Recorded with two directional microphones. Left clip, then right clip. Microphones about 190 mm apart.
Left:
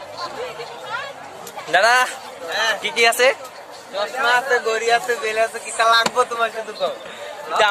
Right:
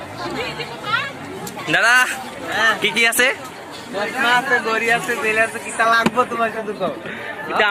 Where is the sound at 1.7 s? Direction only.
15° left (ahead or behind).